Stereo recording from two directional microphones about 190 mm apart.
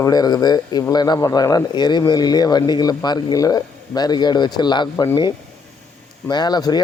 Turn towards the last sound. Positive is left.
turn(degrees=20)  # may be behind; listen again after turning